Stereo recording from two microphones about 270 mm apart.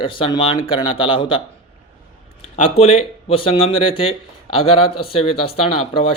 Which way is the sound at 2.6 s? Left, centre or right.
Left.